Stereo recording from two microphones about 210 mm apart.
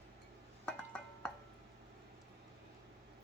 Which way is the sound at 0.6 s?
5° left (ahead or behind).